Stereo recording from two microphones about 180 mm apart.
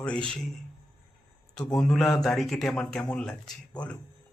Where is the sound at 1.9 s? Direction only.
Centre (ahead or behind).